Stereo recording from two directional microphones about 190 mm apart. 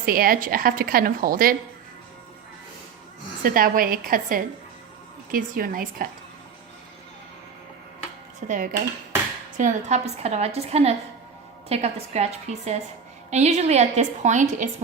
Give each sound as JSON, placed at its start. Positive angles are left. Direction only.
{"t": 0.0, "sound": "a woman's voice", "side_deg": -50}
{"t": 3.4, "sound": "a woman's voice", "side_deg": -50}
{"t": 8.4, "sound": "a woman's voice", "side_deg": -45}